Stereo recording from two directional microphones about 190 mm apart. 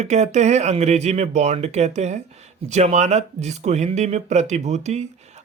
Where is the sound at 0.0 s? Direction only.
35° right (ahead or behind).